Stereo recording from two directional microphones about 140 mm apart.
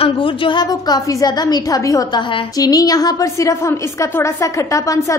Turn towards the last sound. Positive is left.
turn(degrees=20)  # may be behind; listen again after turning